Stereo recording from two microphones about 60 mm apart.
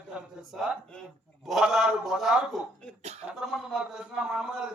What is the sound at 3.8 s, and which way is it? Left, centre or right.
Speech, centre.